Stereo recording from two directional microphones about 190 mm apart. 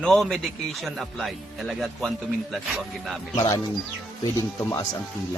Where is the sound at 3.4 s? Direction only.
20° left (ahead or behind).